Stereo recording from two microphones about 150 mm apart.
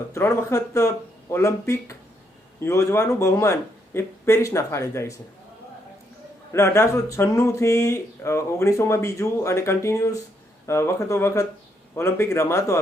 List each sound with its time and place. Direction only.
0.1 s speech: 20° left (ahead or behind)
6.5 s a man's voice: 20° left (ahead or behind)